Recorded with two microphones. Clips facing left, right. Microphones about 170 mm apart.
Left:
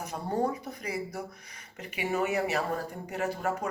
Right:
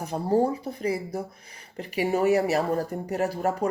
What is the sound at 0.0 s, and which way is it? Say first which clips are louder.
Speech: right 7 dB; 30° right (ahead or behind).